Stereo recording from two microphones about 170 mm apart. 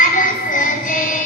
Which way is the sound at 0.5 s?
50° left (ahead or behind).